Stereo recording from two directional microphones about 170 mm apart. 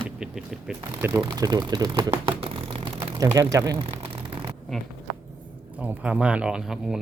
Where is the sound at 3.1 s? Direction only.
20° right (ahead or behind).